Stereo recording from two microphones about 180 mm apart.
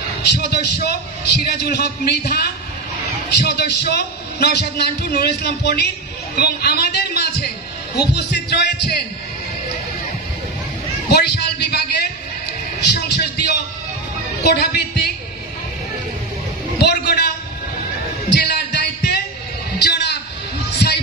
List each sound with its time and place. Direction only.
0.2 s a man's voice: 70° left (ahead or behind)
11.1 s a man's voice: 65° left (ahead or behind)
12.8 s a sound: 65° left (ahead or behind)
14.4 s speech: 65° left (ahead or behind)
16.7 s a man's voice: 65° left (ahead or behind)
18.3 s music: 70° left (ahead or behind)